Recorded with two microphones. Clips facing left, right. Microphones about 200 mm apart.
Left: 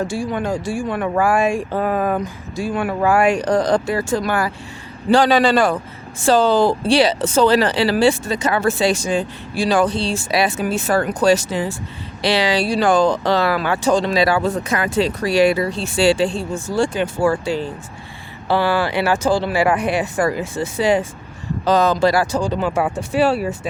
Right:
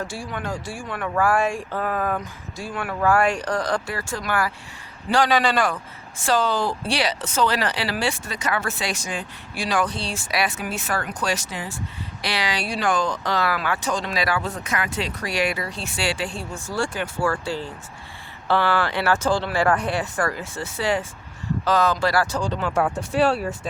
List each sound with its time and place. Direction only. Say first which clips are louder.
0.0 s a man's voice: left 8 dB; 20° left (ahead or behind)